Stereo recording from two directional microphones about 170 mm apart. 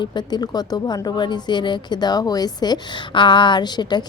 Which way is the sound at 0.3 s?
25° left (ahead or behind).